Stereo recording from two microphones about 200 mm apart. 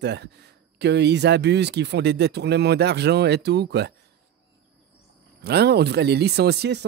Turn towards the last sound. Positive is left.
turn(degrees=-55)  # may be behind; listen again after turning